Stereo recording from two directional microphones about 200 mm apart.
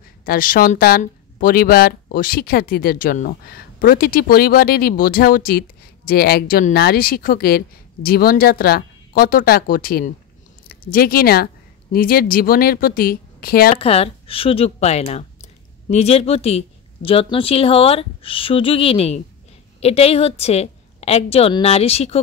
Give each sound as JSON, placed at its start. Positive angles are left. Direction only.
{"t": 0.2, "sound": "speech", "side_deg": 45}
{"t": 13.7, "sound": "a woman's voice", "side_deg": 30}